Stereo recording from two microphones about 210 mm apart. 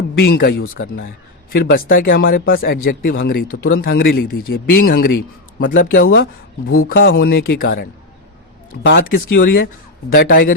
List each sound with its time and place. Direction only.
0.2 s speech: 50° left (ahead or behind)
0.6 s speech: 65° left (ahead or behind)
1.5 s speech: 45° left (ahead or behind)